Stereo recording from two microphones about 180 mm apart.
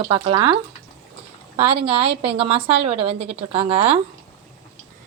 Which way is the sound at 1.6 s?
35° right (ahead or behind).